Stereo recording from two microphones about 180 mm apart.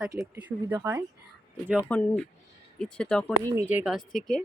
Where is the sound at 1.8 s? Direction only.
10° left (ahead or behind).